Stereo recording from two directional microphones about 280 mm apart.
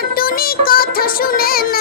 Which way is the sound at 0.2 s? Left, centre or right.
Left.